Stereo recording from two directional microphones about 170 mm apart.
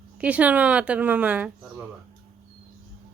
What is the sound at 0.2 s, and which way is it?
A woman's voice, 10° right (ahead or behind).